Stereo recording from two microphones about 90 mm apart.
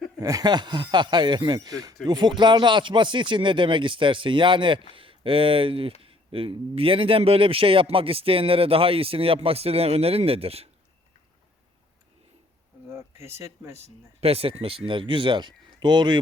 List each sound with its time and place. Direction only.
0.2 s speech: 40° right (ahead or behind); by 4.9 s 65° right (ahead or behind)
4.9 s speech: 80° right
12.9 s speech: 30° right (ahead or behind)
14.2 s speech: 90° right
14.8 s speech: 70° right (ahead or behind)